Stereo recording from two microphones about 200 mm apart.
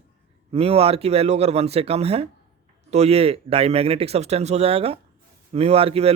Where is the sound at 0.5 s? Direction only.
30° right (ahead or behind).